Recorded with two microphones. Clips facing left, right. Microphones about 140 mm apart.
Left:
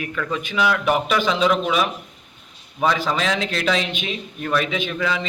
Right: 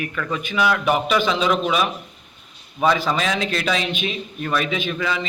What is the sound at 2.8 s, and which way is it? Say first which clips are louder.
A man's voice: right 1 dB; 10° right (ahead or behind).